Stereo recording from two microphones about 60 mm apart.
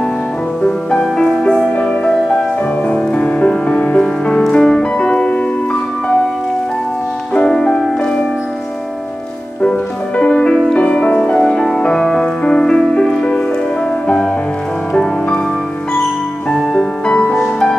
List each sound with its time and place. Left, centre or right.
0.7 s music: centre
1.8 s music: centre
7.3 s music: centre
9.6 s music: left
16.4 s music: centre